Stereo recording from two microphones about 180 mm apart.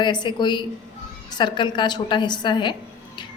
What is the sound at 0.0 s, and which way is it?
A woman's voice, 25° left (ahead or behind).